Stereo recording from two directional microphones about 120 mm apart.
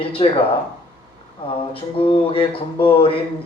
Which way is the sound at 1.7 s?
50° left (ahead or behind).